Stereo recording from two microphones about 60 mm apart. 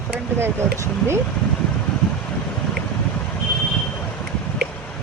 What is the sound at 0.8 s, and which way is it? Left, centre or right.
Speech, right.